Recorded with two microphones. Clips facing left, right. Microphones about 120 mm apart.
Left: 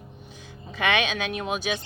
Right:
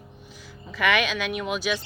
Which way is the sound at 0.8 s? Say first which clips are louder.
Right 1 dB; 25° left (ahead or behind).